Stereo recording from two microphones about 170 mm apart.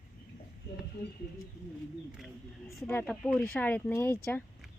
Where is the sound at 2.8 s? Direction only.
10° left (ahead or behind).